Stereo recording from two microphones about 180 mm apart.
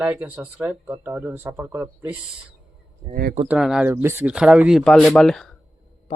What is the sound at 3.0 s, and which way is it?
Speech, 30° right (ahead or behind).